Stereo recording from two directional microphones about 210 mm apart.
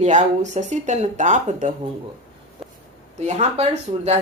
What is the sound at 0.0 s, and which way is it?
A woman's voice, 35° right (ahead or behind).